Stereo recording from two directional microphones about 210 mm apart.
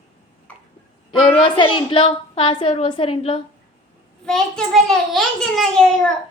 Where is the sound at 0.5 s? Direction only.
5° left (ahead or behind).